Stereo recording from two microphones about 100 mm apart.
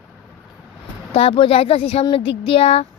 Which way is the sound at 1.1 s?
70° left (ahead or behind).